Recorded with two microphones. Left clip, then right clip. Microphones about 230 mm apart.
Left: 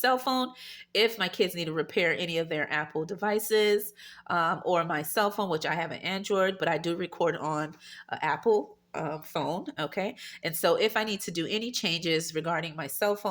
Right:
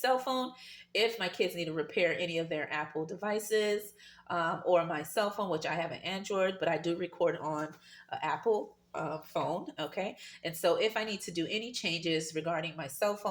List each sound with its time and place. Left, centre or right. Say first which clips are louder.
0.0 s speech: left 4 dB; left